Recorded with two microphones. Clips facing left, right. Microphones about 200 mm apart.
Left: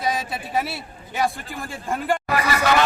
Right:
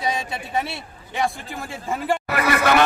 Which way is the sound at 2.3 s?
55° right (ahead or behind).